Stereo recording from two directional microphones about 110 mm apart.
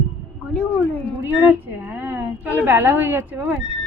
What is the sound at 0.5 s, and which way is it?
Speech, 10° left (ahead or behind).